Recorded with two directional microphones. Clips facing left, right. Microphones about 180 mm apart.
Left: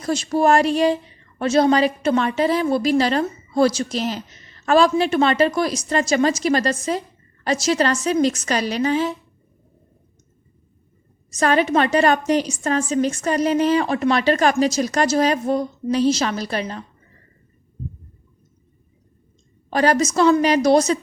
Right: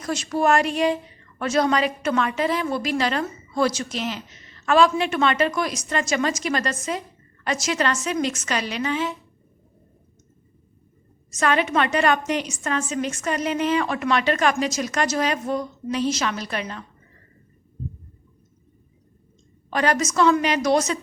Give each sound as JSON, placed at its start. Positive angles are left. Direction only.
{"t": 0.0, "sound": "a woman's voice", "side_deg": 30}
{"t": 11.3, "sound": "a woman's voice", "side_deg": 35}
{"t": 19.7, "sound": "a woman's voice", "side_deg": 35}